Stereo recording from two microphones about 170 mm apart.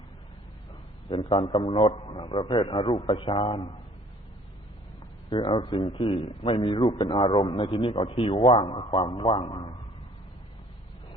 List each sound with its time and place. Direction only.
1.1 s a man's voice: 30° left (ahead or behind)
5.3 s a man's voice: 30° left (ahead or behind)